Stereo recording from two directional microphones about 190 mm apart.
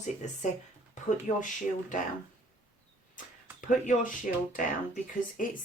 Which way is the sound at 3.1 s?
45° left (ahead or behind).